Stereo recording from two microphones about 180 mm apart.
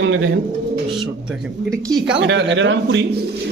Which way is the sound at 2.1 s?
80° right.